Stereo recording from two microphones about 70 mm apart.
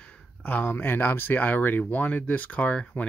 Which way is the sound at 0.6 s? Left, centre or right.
Left.